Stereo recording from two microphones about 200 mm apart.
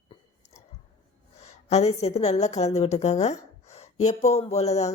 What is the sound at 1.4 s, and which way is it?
A woman's voice, 35° left (ahead or behind).